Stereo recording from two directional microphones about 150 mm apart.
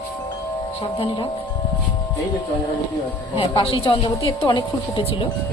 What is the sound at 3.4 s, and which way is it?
A woman's voice, 40° left (ahead or behind).